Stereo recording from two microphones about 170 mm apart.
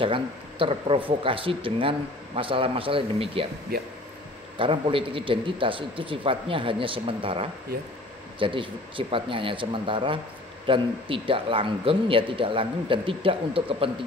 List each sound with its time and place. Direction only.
0.0 s speech: 30° right (ahead or behind)
3.7 s speech: 65° right (ahead or behind)
4.6 s speech: 30° right (ahead or behind)